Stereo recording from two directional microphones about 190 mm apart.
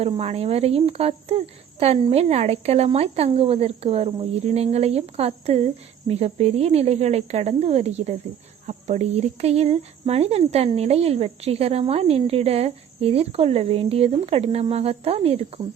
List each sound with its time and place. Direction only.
0.0 s speech: 35° right (ahead or behind)